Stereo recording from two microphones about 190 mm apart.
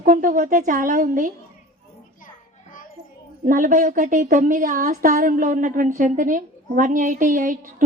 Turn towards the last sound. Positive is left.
turn(degrees=-45)  # may be behind; listen again after turning